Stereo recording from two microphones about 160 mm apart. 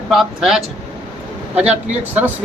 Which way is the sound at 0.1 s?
Centre (ahead or behind).